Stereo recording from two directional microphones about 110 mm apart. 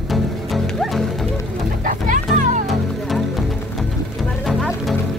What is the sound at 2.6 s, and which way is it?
Music, centre (ahead or behind).